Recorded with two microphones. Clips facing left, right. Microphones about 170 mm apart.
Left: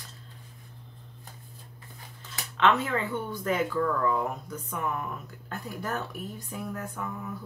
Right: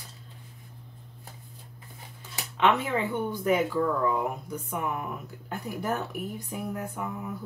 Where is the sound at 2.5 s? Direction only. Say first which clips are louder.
Even; 10° right (ahead or behind).